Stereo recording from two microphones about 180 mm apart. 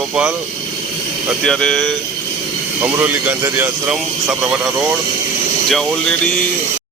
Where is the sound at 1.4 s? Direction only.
5° left (ahead or behind).